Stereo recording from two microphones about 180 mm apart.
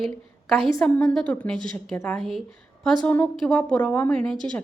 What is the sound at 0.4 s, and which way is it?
Speech, centre (ahead or behind).